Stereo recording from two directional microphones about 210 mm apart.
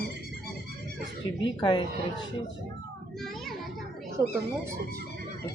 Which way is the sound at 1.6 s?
20° left (ahead or behind).